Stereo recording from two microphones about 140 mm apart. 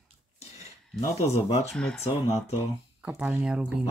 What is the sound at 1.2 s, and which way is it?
Speech, 50° left (ahead or behind).